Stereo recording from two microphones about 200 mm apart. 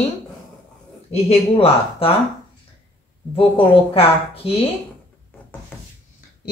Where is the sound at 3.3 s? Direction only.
25° left (ahead or behind).